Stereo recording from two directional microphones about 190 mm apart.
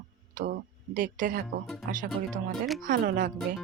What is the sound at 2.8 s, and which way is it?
Speech, 50° right (ahead or behind).